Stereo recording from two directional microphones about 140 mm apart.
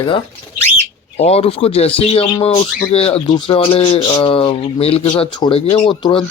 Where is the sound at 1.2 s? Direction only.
45° left (ahead or behind).